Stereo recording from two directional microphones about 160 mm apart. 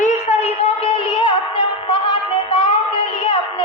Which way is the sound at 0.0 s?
45° left (ahead or behind).